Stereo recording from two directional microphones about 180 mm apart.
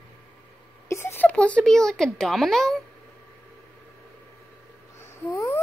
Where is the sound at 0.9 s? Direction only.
15° left (ahead or behind).